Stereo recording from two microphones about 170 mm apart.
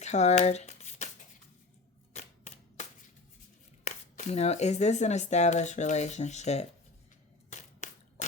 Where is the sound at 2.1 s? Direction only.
40° left (ahead or behind).